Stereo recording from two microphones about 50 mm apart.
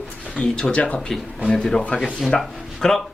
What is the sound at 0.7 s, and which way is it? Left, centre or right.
Speech, left.